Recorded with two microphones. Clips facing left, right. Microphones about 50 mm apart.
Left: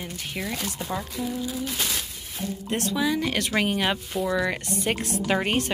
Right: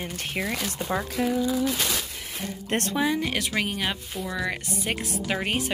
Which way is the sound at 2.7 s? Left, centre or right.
Right.